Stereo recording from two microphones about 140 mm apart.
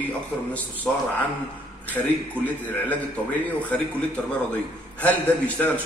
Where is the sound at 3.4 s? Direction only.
10° left (ahead or behind).